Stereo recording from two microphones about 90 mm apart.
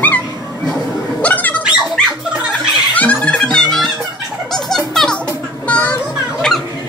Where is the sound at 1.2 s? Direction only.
20° left (ahead or behind).